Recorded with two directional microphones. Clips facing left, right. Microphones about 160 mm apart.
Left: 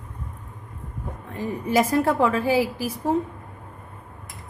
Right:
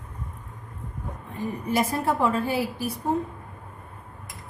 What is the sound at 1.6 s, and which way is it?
A woman's voice, 90° left.